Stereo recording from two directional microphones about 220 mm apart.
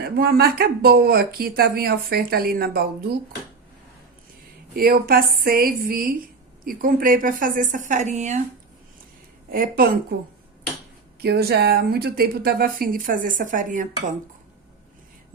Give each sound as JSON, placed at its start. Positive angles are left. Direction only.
{"t": 0.0, "sound": "speech", "side_deg": -45}
{"t": 4.7, "sound": "a woman's voice", "side_deg": -40}
{"t": 9.5, "sound": "a woman's voice", "side_deg": -40}
{"t": 11.2, "sound": "speech", "side_deg": -45}